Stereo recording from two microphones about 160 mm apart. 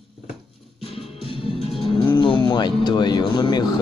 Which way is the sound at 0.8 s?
35° left (ahead or behind).